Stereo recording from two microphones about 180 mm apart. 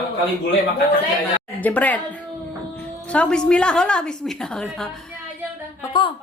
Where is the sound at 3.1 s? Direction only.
5° left (ahead or behind).